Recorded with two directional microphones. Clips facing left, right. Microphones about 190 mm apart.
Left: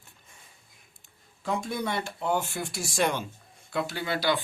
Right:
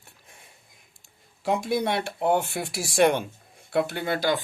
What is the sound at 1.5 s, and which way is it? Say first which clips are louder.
Speech: right 5 dB; 70° right (ahead or behind).